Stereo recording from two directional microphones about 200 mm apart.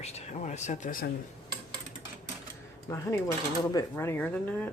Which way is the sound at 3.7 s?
15° left (ahead or behind).